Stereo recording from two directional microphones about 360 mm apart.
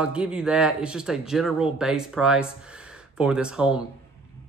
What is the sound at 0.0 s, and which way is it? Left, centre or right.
Speech, centre.